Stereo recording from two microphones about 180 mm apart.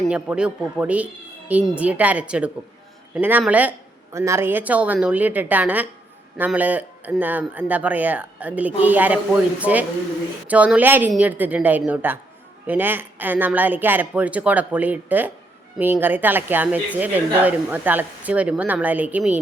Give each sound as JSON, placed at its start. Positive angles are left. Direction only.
{"t": 0.0, "sound": "a woman's voice", "side_deg": -5}